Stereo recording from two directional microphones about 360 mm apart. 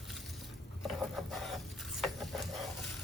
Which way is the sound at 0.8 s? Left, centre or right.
Centre.